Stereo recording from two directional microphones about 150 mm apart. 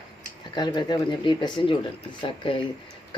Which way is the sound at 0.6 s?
30° left (ahead or behind).